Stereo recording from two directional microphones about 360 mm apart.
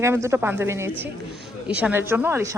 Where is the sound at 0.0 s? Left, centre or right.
Centre.